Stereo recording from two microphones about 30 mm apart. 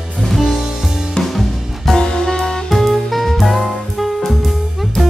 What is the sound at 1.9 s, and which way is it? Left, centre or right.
Music, left.